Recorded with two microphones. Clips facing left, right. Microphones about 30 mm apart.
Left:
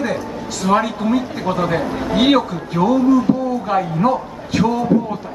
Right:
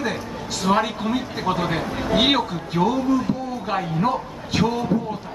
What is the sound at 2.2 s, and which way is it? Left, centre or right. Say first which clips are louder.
Speech: left 5 dB; centre.